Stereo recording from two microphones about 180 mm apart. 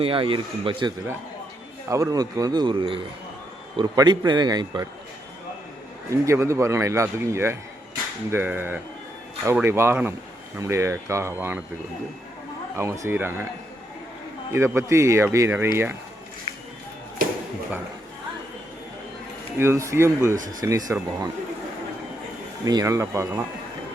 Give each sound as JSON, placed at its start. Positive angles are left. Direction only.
{"t": 0.0, "sound": "a man's voice", "side_deg": -30}
{"t": 6.1, "sound": "a man's voice", "side_deg": -15}
{"t": 12.7, "sound": "a man's voice", "side_deg": -15}
{"t": 14.5, "sound": "a man's voice", "side_deg": -15}
{"t": 19.5, "sound": "a man's voice", "side_deg": -15}
{"t": 20.3, "sound": "speech", "side_deg": -45}
{"t": 20.6, "sound": "a man's voice", "side_deg": -20}
{"t": 22.6, "sound": "a man's voice", "side_deg": -20}